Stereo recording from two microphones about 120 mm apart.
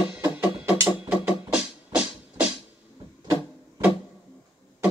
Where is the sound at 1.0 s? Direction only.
10° right (ahead or behind).